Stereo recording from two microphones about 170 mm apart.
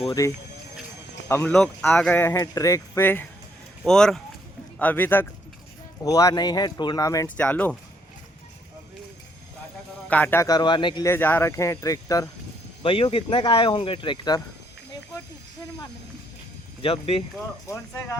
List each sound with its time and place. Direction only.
0.0 s speech: 25° left (ahead or behind)
1.3 s speech: 15° left (ahead or behind)
1.5 s speech: centre (ahead or behind); by 7.3 s 20° left (ahead or behind)
7.3 s speech: 10° left (ahead or behind)
10.1 s speech: 10° left (ahead or behind); by 11.0 s 25° left (ahead or behind)
11.0 s speech: 15° left (ahead or behind)
12.8 s speech: 30° left (ahead or behind)
16.8 s speech: 35° left (ahead or behind)
17.7 s speech: 15° left (ahead or behind)